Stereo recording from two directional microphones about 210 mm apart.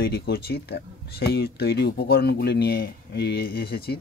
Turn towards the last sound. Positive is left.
turn(degrees=45)  # may be behind; listen again after turning